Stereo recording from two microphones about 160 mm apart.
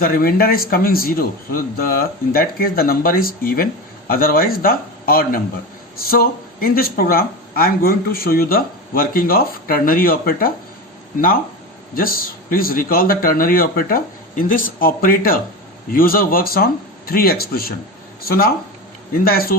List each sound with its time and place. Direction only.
0.0 s speech: 65° left (ahead or behind)
11.9 s speech: 65° left (ahead or behind)